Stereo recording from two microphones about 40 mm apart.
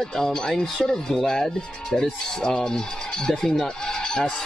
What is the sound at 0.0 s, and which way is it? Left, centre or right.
Speech, centre.